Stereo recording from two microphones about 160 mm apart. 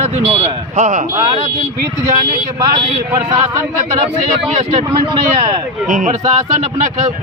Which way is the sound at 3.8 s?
45° right (ahead or behind).